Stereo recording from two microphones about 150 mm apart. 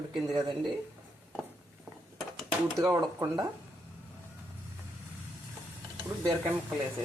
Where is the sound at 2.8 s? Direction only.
20° right (ahead or behind).